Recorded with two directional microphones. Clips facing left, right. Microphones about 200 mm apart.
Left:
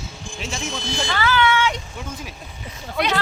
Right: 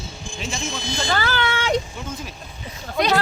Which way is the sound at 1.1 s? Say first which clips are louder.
Left 4 dB; 40° right (ahead or behind).